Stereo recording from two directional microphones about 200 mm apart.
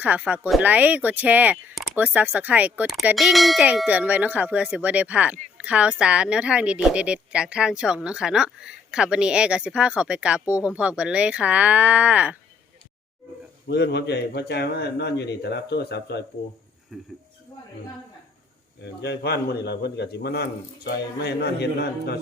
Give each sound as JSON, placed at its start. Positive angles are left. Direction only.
{"t": 0.0, "sound": "speech", "side_deg": -5}
{"t": 13.7, "sound": "speech", "side_deg": 55}
{"t": 16.9, "sound": "speech", "side_deg": 0}
{"t": 19.0, "sound": "speech", "side_deg": 55}